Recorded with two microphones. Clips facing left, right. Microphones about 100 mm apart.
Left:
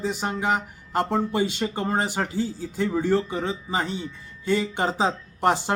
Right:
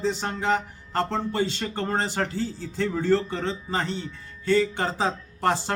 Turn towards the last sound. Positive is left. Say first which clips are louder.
# left 2 dB
turn(degrees=15)  # may be behind; listen again after turning